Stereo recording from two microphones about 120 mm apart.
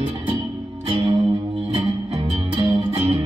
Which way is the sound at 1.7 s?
50° right (ahead or behind).